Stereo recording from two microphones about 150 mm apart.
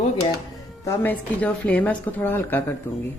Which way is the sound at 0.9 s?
10° left (ahead or behind).